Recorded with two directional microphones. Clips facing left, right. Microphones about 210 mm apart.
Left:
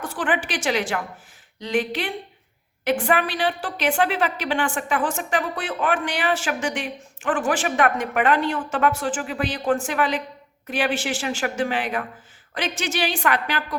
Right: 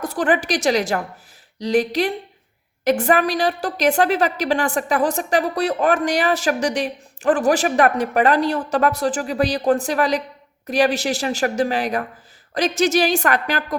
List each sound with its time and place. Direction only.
0.0 s a woman's voice: 40° right (ahead or behind)